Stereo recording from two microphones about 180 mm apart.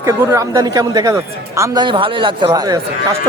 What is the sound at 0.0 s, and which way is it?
A man's voice, 15° right (ahead or behind).